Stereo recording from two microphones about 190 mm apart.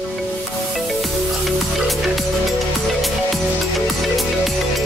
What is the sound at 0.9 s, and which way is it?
Music, centre (ahead or behind).